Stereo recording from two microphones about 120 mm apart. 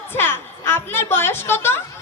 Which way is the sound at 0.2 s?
20° left (ahead or behind).